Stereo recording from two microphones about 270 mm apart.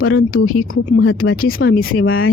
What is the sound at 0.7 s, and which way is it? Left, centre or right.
Speech, left.